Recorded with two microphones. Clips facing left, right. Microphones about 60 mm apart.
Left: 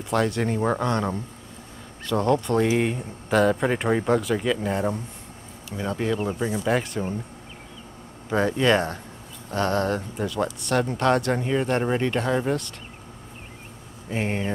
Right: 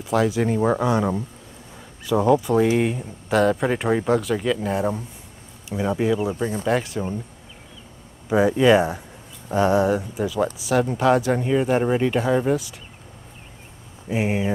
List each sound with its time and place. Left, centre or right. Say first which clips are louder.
0.0 s speech: right 3 dB; centre
5.7 s speech: right 5 dB; centre
8.3 s speech: right 5 dB; centre
14.0 s speech: right 4 dB; centre